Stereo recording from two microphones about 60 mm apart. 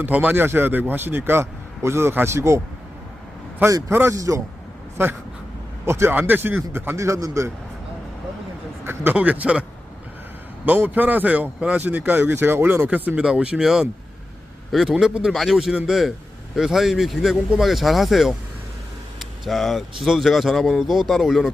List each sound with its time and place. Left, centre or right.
0.0 s a man's voice: right
3.7 s a man's voice: right
5.0 s speech: right
6.1 s a man's voice: right
6.9 s a man's voice: right
8.8 s speech: right
9.1 s speech: right
10.7 s a man's voice: right
13.3 s speech: centre
13.6 s a man's voice: centre
14.9 s a man's voice: centre
15.3 s speech: centre
15.5 s a man's voice: centre